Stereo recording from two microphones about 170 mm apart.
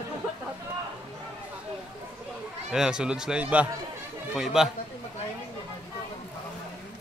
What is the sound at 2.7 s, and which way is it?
A man's voice, 5° right (ahead or behind).